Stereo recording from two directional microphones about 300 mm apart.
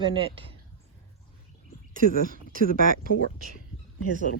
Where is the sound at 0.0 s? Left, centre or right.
Centre.